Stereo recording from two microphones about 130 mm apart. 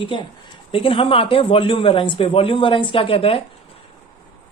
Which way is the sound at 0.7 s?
45° left (ahead or behind).